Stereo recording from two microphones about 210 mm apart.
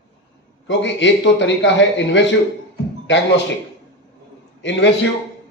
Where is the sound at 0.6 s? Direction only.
60° left (ahead or behind).